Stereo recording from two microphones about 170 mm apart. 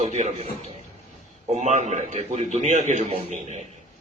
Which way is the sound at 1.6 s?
45° right (ahead or behind).